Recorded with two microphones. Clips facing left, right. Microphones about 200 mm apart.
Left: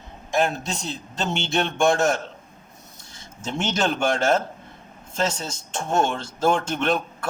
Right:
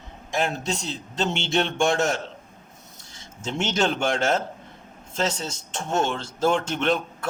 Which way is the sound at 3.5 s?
50° left (ahead or behind).